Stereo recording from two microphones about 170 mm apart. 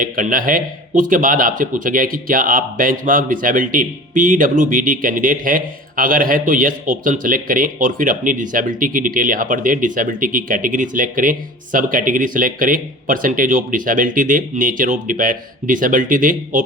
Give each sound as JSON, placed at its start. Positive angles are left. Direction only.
{"t": 0.0, "sound": "a man's voice", "side_deg": -55}